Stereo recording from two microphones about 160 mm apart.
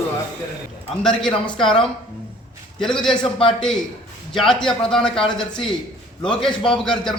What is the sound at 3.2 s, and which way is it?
Speech, 30° left (ahead or behind).